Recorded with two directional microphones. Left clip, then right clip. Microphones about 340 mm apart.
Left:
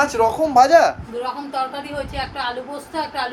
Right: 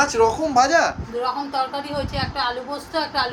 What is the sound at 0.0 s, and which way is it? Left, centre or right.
Speech, centre.